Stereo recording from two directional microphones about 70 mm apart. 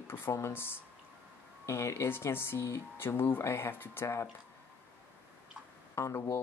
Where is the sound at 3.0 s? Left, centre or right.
Left.